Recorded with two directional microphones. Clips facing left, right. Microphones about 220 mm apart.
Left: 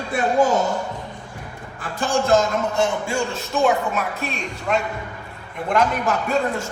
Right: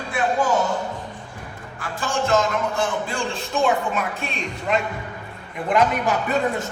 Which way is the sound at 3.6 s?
5° left (ahead or behind).